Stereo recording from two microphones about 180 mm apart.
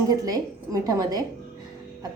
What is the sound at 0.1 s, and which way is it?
A woman's voice, 20° right (ahead or behind).